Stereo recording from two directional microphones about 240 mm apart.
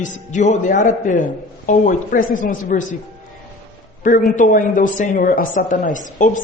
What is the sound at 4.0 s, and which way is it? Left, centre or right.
A man's voice, left.